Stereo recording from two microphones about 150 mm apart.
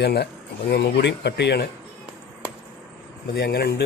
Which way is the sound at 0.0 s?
90° left.